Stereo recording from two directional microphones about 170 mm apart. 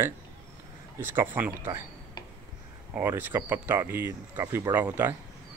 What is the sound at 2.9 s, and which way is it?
Speech, 10° right (ahead or behind).